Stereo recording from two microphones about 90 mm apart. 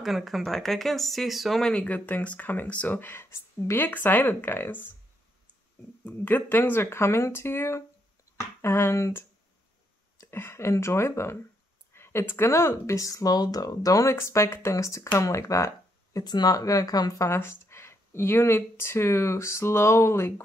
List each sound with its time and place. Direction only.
0.0 s speech: centre (ahead or behind); by 4.9 s 20° left (ahead or behind)
6.0 s speech: 20° left (ahead or behind)
10.2 s speech: 25° left (ahead or behind)